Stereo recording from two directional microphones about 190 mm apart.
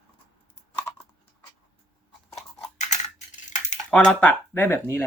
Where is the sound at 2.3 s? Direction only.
40° left (ahead or behind).